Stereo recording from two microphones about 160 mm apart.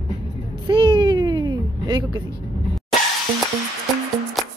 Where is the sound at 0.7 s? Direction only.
30° right (ahead or behind).